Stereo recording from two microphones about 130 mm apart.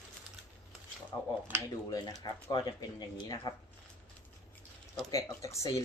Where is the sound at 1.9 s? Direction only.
30° left (ahead or behind).